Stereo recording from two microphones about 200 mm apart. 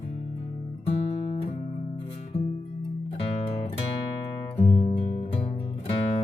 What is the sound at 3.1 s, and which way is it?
Music, 30° left (ahead or behind).